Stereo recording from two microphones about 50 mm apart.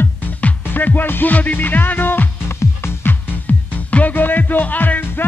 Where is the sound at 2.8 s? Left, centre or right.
Left.